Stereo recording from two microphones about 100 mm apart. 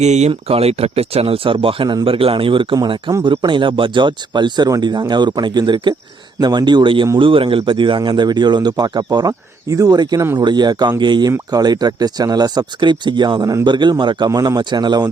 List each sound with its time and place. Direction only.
0.2 s speech: 80° right; by 14.3 s 50° right (ahead or behind)
14.3 s speech: 40° right (ahead or behind)